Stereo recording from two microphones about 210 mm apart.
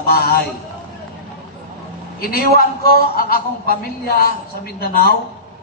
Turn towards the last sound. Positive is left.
turn(degrees=45)  # may be behind; listen again after turning